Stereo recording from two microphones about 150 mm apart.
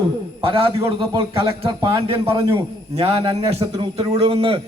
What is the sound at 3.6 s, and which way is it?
Speech, 25° right (ahead or behind).